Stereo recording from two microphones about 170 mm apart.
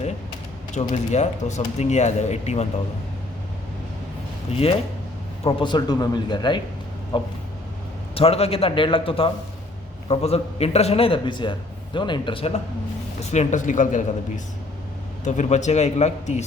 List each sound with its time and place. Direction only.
0.7 s speech: 45° left (ahead or behind)
5.4 s a man's voice: 35° left (ahead or behind)